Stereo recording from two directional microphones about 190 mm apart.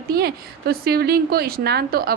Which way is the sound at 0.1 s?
55° right (ahead or behind).